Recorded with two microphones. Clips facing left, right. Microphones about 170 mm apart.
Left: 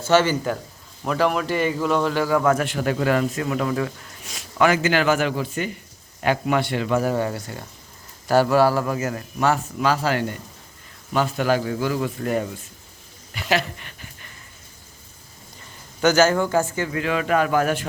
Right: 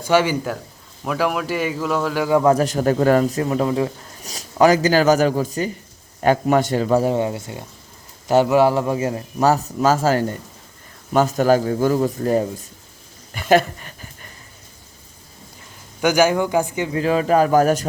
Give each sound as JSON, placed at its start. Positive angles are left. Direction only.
{"t": 0.0, "sound": "speech", "side_deg": -10}
{"t": 2.2, "sound": "speech", "side_deg": -25}
{"t": 13.3, "sound": "a sound", "side_deg": -50}
{"t": 16.0, "sound": "speech", "side_deg": -10}
{"t": 16.9, "sound": "speech", "side_deg": -35}